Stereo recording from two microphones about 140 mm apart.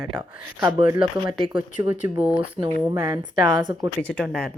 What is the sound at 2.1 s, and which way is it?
Speech, 15° right (ahead or behind).